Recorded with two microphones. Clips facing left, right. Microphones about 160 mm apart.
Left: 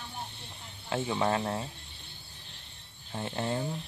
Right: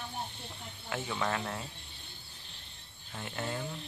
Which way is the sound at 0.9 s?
30° left (ahead or behind).